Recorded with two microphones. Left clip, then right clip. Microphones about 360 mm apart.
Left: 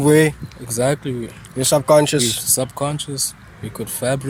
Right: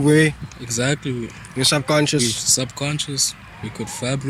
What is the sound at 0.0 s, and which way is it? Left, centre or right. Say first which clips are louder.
Speech: left 2 dB; left.